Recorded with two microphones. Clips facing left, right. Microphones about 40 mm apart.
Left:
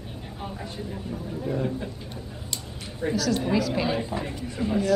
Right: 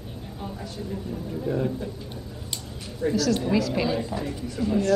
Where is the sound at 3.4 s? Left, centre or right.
Centre.